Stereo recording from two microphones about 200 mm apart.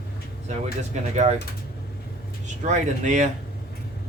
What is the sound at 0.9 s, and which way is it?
Speech, 35° right (ahead or behind).